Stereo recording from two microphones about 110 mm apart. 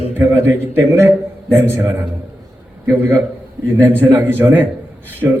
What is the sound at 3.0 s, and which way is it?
A man's voice, 20° right (ahead or behind).